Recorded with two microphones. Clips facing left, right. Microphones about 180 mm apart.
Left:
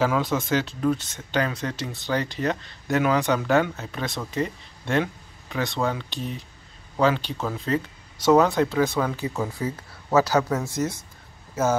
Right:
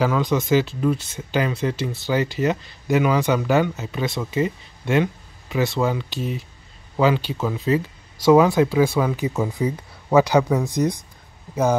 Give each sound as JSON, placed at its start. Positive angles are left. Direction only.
{"t": 0.0, "sound": "speech", "side_deg": 5}